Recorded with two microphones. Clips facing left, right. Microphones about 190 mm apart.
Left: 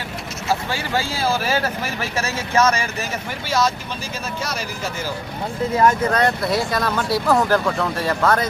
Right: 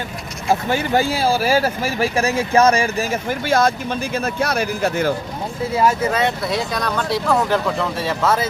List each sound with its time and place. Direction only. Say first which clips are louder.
0.7 s speech: right 6 dB; 20° right (ahead or behind)
2.2 s speech: right 3 dB; 35° right (ahead or behind)
3.2 s speech: right 3 dB; 55° right (ahead or behind)
5.7 s speech: even; 10° right (ahead or behind)